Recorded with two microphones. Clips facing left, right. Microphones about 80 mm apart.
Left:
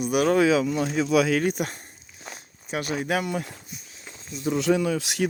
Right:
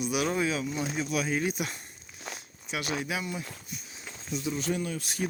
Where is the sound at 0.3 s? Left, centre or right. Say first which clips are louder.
Left 9 dB; left.